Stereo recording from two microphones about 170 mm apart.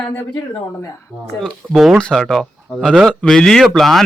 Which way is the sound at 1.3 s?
Centre (ahead or behind).